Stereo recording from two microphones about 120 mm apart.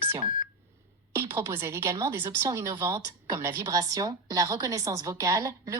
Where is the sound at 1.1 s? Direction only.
20° right (ahead or behind).